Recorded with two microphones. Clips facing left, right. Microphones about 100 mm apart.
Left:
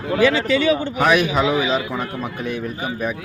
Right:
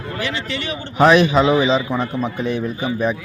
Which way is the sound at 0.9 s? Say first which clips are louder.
Right 10 dB; 30° right (ahead or behind).